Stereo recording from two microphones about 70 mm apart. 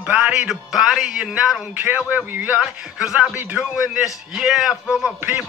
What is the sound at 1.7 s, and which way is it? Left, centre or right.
Speech, right.